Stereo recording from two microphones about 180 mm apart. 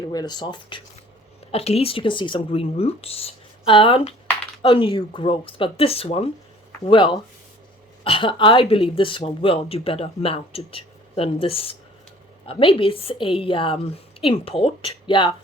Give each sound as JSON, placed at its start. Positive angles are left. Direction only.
{"t": 0.1, "sound": "speech", "side_deg": 20}